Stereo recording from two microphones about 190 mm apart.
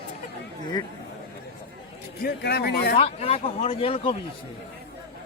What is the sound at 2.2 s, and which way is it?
Speech, 60° left (ahead or behind).